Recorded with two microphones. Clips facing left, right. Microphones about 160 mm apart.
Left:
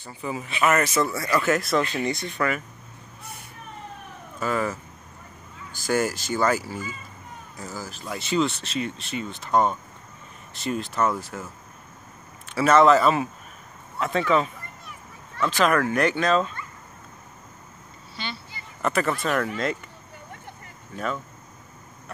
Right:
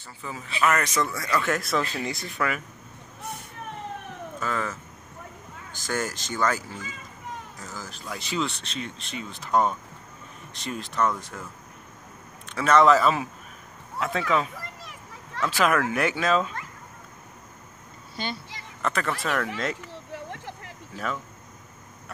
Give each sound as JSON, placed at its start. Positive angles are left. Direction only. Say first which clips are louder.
{"t": 0.0, "sound": "speech", "louder": "left 6 dB", "side_deg": 15}
{"t": 4.4, "sound": "speech", "louder": "left 5 dB", "side_deg": 10}
{"t": 12.4, "sound": "speech", "louder": "left 2 dB", "side_deg": 5}
{"t": 14.6, "sound": "a sound", "louder": "right 2 dB", "side_deg": -90}
{"t": 15.4, "sound": "speech", "louder": "left 2 dB", "side_deg": -5}
{"t": 18.1, "sound": "speech", "louder": "right 3 dB", "side_deg": -45}
{"t": 18.8, "sound": "a sound", "louder": "left 4 dB", "side_deg": 5}
{"t": 19.2, "sound": "speech", "louder": "left 3 dB", "side_deg": 0}
{"t": 19.9, "sound": "a sound", "louder": "right 7 dB", "side_deg": -85}
{"t": 20.9, "sound": "speech", "louder": "left 2 dB", "side_deg": 0}